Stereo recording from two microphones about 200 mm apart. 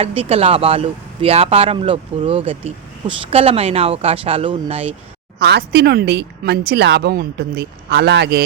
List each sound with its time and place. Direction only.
0.0 s speech: 30° right (ahead or behind)
5.4 s speech: 55° right (ahead or behind)